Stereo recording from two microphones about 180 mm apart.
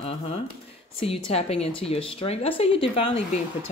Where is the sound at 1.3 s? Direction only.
35° left (ahead or behind).